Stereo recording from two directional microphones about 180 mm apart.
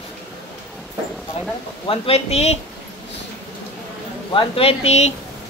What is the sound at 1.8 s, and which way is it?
Speech, 30° left (ahead or behind).